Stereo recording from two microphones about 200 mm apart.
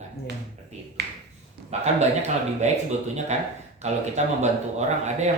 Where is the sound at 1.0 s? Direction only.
60° right (ahead or behind).